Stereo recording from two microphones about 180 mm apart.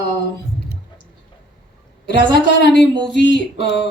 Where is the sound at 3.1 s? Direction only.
90° left.